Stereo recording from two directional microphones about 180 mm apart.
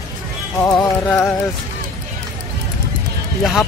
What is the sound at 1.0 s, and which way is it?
Speech, 5° left (ahead or behind).